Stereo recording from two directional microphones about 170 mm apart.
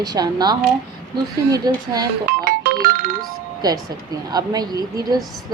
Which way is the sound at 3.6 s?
20° right (ahead or behind).